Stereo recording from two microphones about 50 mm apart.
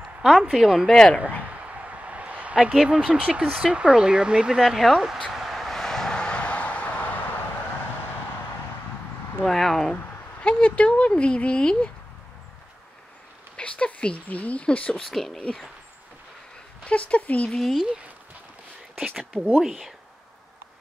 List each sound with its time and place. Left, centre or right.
0.2 s speech: centre
0.8 s speech: centre
1.4 s a sound: right
2.7 s speech: centre
3.1 s speech: right; by 5.2 s centre
5.3 s vehicle: centre; by 7.1 s left
9.4 s speech: centre
10.4 s speech: left
13.6 s speech: left
15.0 s speech: centre
16.8 s speech: left
17.6 s speech: centre
18.9 s speech: centre